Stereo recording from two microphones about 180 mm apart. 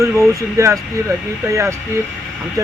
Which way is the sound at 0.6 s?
15° right (ahead or behind).